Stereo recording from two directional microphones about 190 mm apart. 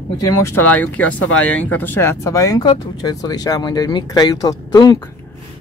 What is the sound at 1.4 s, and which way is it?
Speech, 90° left.